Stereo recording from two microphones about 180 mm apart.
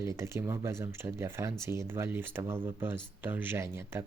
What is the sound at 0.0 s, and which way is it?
Speech, 15° right (ahead or behind).